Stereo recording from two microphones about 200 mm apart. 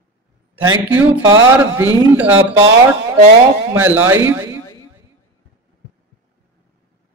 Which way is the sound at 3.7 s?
10° right (ahead or behind).